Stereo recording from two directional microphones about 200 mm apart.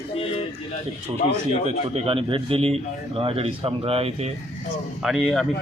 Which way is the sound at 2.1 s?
25° right (ahead or behind).